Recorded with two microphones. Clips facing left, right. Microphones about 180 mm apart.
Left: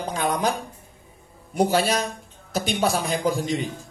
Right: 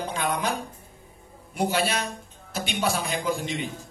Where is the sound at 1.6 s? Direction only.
40° left (ahead or behind).